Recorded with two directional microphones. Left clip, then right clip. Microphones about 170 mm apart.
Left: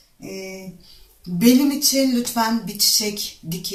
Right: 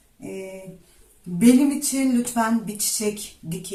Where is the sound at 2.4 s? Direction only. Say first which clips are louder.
Left 2 dB; 10° right (ahead or behind).